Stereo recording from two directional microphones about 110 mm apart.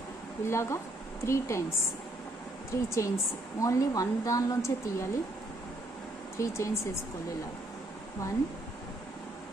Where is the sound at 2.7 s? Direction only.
25° left (ahead or behind).